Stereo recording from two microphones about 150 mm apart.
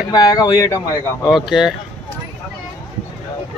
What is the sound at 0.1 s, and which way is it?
Speech, 25° left (ahead or behind).